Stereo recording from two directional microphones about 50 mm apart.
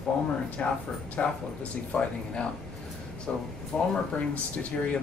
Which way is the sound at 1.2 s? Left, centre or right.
Left.